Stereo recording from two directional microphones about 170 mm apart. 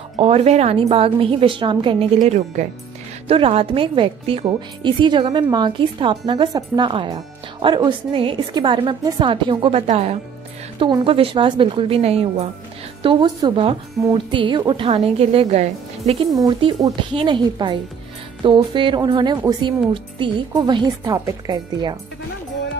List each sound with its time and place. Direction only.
0.2 s a woman's voice: 35° right (ahead or behind)
16.3 s a woman's voice: 20° right (ahead or behind)